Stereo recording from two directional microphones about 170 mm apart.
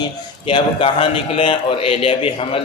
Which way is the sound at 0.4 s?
30° left (ahead or behind).